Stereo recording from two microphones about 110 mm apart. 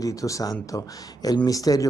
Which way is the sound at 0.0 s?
30° left (ahead or behind).